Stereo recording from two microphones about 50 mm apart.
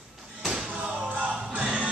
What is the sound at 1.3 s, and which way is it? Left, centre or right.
Music, centre.